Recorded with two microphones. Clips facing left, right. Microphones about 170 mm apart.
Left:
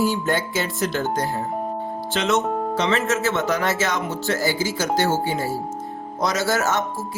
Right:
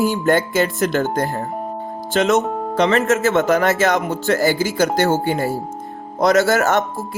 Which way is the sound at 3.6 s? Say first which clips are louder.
Right 6 dB; 50° right (ahead or behind).